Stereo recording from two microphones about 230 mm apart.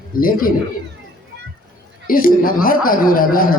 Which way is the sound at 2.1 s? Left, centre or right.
Left.